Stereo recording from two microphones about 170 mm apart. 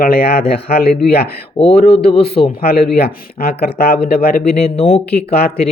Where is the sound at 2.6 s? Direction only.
65° left (ahead or behind).